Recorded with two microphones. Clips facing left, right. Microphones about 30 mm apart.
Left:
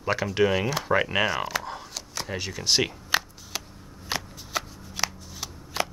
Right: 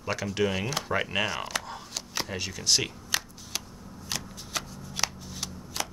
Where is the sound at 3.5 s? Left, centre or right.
Centre.